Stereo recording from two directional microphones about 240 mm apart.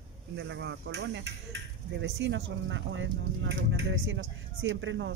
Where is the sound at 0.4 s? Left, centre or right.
Right.